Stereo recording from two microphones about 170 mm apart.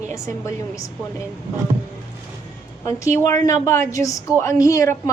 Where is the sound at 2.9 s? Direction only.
15° left (ahead or behind).